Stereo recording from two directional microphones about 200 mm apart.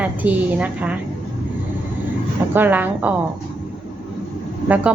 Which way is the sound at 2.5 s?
10° right (ahead or behind).